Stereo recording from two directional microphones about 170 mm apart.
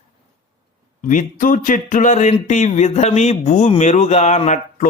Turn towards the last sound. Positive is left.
turn(degrees=50)  # may be behind; listen again after turning